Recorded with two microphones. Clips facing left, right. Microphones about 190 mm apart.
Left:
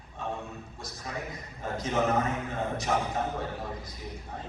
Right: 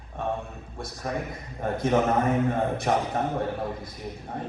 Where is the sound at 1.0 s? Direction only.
55° right (ahead or behind).